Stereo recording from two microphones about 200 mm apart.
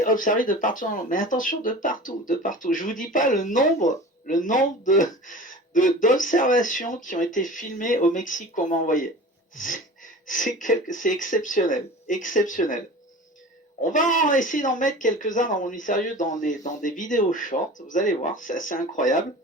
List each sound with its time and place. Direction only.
0.0 s speech: 40° left (ahead or behind)
13.9 s speech: 40° left (ahead or behind)